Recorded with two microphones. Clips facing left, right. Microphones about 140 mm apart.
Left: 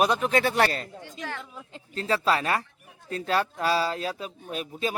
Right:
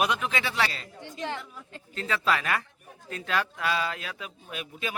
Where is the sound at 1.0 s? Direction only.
20° right (ahead or behind).